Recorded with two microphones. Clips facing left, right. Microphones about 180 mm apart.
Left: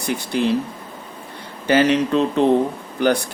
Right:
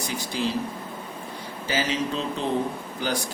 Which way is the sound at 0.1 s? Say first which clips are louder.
Left 9 dB; 60° left (ahead or behind).